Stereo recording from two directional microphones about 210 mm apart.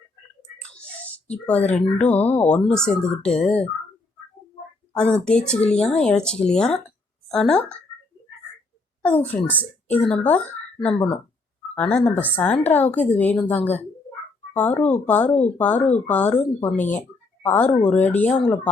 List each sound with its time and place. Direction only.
0.6 s whispering: 5° left (ahead or behind)
1.3 s a woman's voice: 5° left (ahead or behind)
4.9 s speech: 5° left (ahead or behind)
9.0 s a woman's voice: 5° left (ahead or behind)